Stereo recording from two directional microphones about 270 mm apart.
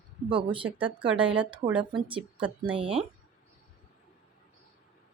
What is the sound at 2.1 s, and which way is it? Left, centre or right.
Speech, centre.